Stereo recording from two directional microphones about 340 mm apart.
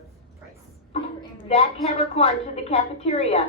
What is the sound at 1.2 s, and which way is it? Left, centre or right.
A woman's voice, centre.